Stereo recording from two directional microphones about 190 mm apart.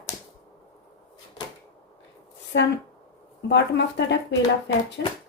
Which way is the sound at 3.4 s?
65° left (ahead or behind).